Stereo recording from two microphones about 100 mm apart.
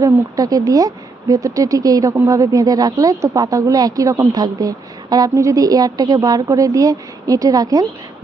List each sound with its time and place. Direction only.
0.0 s a woman's voice: 35° right (ahead or behind)